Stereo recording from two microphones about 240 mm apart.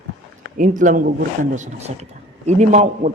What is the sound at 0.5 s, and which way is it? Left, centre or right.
Speech, right.